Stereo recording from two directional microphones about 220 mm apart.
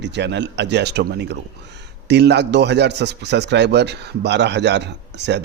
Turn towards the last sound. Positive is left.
turn(degrees=-50)  # may be behind; listen again after turning